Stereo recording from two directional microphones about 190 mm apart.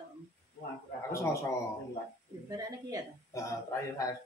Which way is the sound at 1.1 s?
15° left (ahead or behind).